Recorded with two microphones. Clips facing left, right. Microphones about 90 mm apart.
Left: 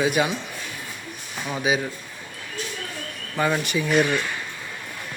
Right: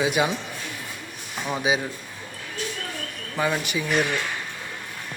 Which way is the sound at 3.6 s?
5° right (ahead or behind).